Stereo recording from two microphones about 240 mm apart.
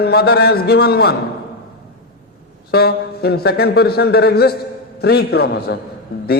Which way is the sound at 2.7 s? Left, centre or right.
Left.